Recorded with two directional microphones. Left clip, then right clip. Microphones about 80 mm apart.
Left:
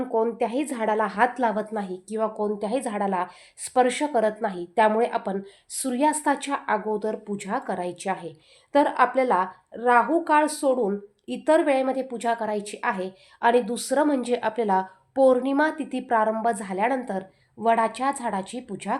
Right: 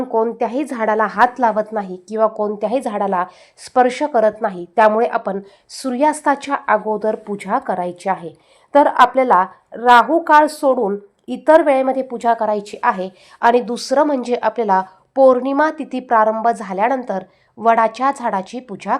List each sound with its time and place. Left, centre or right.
0.0 s a woman's voice: right
3.1 s a woman's voice: right
6.7 s a woman's voice: right
12.0 s a woman's voice: right
13.7 s a woman's voice: right
17.1 s a woman's voice: right